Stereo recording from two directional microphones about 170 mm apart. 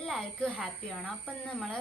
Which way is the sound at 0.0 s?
5° left (ahead or behind).